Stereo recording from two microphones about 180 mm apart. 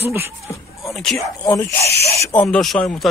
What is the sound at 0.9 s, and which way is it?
Speech, centre (ahead or behind).